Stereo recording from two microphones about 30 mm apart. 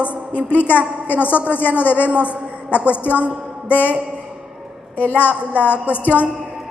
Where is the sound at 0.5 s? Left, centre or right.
Left.